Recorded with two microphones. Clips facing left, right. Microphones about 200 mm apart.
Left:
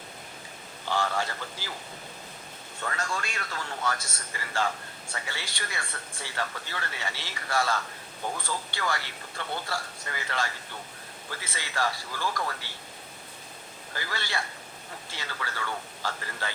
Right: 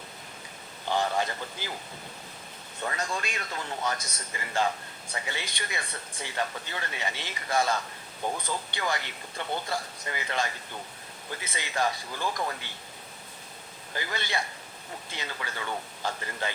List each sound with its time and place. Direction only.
0.9 s a man's voice: 20° right (ahead or behind)
2.8 s a man's voice: 20° right (ahead or behind)
13.9 s a man's voice: 20° right (ahead or behind)